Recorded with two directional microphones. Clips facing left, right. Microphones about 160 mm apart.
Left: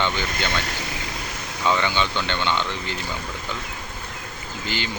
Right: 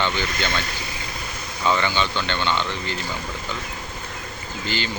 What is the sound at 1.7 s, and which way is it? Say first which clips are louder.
Speech: even; 15° left (ahead or behind).